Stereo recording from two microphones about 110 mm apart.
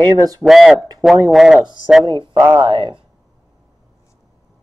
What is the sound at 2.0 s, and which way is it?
Speech, 45° right (ahead or behind).